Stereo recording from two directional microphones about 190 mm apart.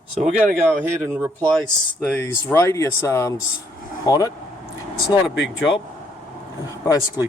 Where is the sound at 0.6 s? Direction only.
10° right (ahead or behind).